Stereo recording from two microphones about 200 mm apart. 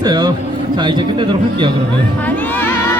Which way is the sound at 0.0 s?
20° right (ahead or behind).